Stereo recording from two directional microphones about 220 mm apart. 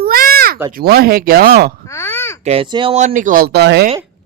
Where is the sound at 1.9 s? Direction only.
10° left (ahead or behind).